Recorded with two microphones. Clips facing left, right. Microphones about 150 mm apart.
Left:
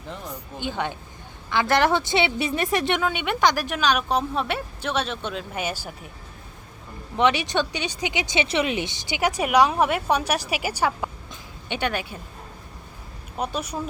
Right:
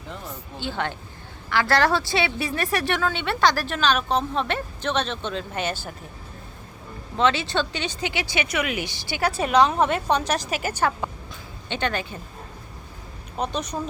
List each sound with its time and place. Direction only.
0.3 s a woman's voice: 15° left (ahead or behind)
7.2 s a woman's voice: 15° left (ahead or behind)
13.3 s a woman's voice: 10° left (ahead or behind)